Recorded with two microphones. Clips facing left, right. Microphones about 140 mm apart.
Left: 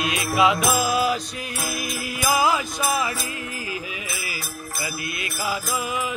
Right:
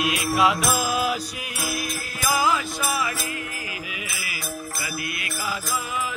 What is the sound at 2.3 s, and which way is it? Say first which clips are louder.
Music: left 1 dB; 20° left (ahead or behind).